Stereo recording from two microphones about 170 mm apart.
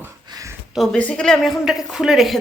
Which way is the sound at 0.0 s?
15° right (ahead or behind).